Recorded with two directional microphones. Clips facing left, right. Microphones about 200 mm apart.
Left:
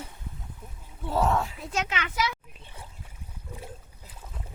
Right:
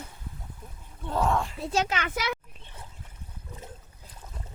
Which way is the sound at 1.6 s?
35° right (ahead or behind).